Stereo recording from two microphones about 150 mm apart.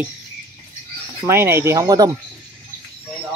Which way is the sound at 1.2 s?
15° right (ahead or behind).